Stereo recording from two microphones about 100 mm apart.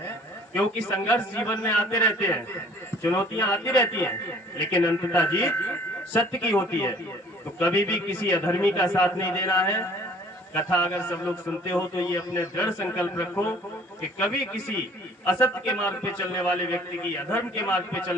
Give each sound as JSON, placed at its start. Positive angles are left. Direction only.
{"t": 0.5, "sound": "a man's voice", "side_deg": 20}
{"t": 3.0, "sound": "a man's voice", "side_deg": 25}
{"t": 11.8, "sound": "a man's voice", "side_deg": 35}
{"t": 12.4, "sound": "a man's voice", "side_deg": 20}
{"t": 15.3, "sound": "a man's voice", "side_deg": 20}